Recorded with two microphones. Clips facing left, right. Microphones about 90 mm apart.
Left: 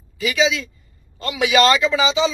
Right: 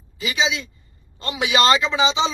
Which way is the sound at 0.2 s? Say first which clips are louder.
Left 4 dB; 35° right (ahead or behind).